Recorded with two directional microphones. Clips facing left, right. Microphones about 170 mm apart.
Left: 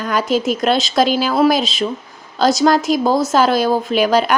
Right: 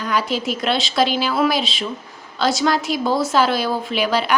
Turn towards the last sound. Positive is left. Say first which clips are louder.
# left 6 dB
turn(degrees=45)  # may be behind; listen again after turning